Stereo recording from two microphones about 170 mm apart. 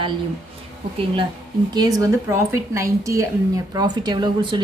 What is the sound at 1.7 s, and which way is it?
A woman's voice, 20° right (ahead or behind).